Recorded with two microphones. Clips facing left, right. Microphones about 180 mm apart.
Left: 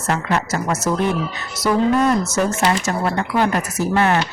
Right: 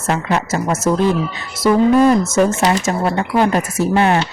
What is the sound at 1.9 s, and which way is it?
Speech, 10° right (ahead or behind).